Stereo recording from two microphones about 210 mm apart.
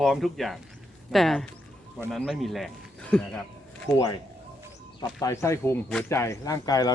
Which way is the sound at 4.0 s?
15° left (ahead or behind).